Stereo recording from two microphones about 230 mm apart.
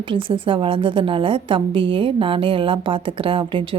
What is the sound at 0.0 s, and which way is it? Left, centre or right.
A woman's voice, right.